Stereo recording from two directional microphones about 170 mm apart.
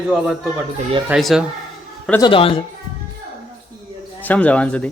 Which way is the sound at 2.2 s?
30° left (ahead or behind).